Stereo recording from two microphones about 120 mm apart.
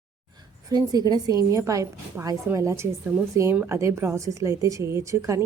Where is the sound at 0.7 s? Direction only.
35° right (ahead or behind).